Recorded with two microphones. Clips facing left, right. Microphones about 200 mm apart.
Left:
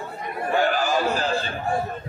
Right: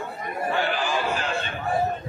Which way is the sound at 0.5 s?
45° left (ahead or behind).